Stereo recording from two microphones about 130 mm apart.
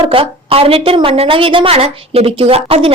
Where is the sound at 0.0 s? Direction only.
45° right (ahead or behind).